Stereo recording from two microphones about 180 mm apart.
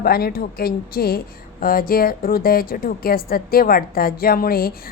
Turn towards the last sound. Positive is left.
turn(degrees=55)  # may be behind; listen again after turning